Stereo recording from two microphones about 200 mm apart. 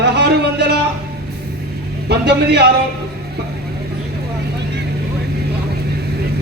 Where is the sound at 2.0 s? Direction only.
55° right (ahead or behind).